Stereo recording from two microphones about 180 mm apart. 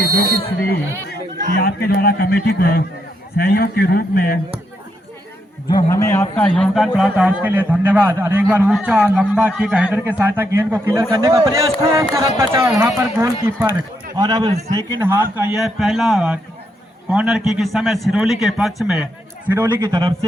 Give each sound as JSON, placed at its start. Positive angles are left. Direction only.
{"t": 1.5, "sound": "a man's voice", "side_deg": 60}
{"t": 5.6, "sound": "a man's voice", "side_deg": 20}
{"t": 12.7, "sound": "speech", "side_deg": 0}
{"t": 13.0, "sound": "a man's voice", "side_deg": -15}
{"t": 15.5, "sound": "speech", "side_deg": 0}
{"t": 19.5, "sound": "a man's voice", "side_deg": -15}